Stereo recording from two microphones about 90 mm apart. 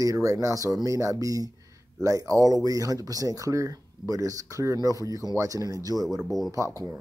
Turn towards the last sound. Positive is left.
turn(degrees=-40)  # may be behind; listen again after turning